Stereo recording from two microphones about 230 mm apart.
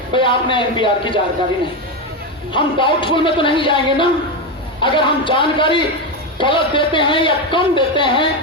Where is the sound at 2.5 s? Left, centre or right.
Left.